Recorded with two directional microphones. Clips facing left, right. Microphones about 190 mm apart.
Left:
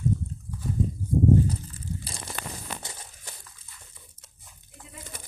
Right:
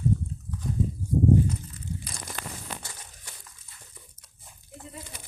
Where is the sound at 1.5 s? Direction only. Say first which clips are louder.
Left 1 dB; 30° left (ahead or behind).